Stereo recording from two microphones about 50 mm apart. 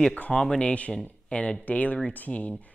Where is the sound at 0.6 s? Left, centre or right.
Left.